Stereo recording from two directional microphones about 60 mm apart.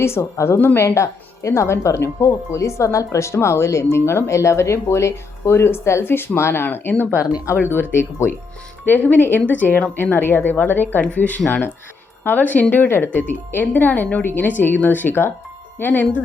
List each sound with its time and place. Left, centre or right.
0.0 s a woman's voice: left